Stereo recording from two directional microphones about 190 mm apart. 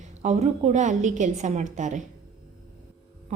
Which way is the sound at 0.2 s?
35° right (ahead or behind).